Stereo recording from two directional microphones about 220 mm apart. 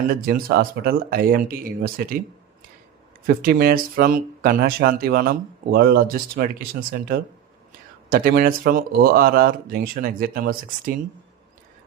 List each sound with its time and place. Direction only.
0.1 s speech: 40° right (ahead or behind)
3.2 s speech: 40° right (ahead or behind)